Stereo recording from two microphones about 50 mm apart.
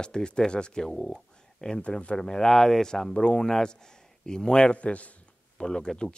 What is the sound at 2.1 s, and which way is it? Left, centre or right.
Speech, centre.